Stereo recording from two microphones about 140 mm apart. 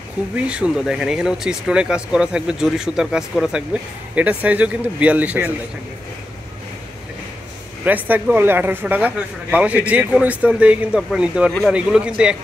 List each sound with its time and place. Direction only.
0.4 s speech: 5° right (ahead or behind)
7.8 s speech: 10° right (ahead or behind)